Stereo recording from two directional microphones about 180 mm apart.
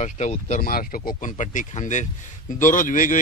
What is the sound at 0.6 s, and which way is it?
A man's voice, 55° left (ahead or behind).